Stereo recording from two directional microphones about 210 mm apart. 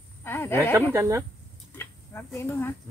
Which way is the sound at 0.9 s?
15° right (ahead or behind).